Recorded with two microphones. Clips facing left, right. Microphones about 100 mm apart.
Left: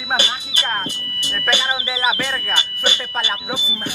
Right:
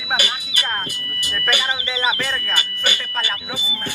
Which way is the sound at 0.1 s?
30° left (ahead or behind).